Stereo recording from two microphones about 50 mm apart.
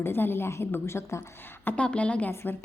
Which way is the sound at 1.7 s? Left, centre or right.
Left.